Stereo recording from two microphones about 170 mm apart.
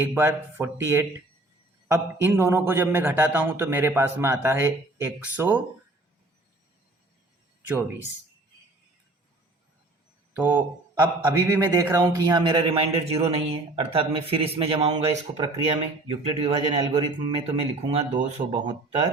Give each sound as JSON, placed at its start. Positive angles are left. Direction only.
{"t": 0.0, "sound": "speech", "side_deg": -10}
{"t": 10.3, "sound": "a man's voice", "side_deg": -10}
{"t": 18.5, "sound": "speech", "side_deg": -30}